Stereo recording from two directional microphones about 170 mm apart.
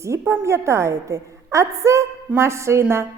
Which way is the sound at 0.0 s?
15° right (ahead or behind).